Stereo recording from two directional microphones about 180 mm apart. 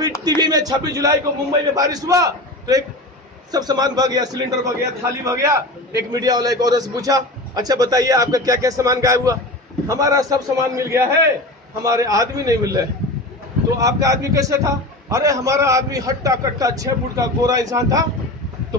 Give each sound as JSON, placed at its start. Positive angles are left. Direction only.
{"t": 0.4, "sound": "a man's voice", "side_deg": -20}